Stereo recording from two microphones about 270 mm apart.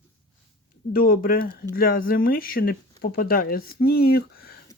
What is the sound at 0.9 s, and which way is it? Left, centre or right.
Speech, left.